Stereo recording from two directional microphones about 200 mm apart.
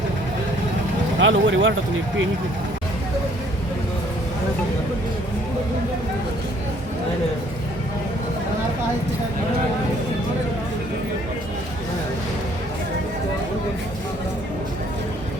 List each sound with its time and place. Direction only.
1.2 s speech: 70° right (ahead or behind)